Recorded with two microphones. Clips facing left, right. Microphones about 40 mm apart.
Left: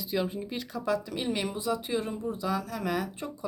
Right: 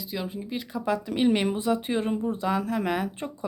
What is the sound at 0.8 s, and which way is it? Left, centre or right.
Speech, right.